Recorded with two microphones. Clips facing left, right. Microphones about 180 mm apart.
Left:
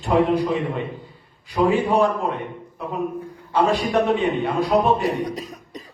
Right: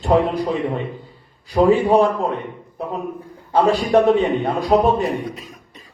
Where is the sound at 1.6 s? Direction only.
40° right (ahead or behind).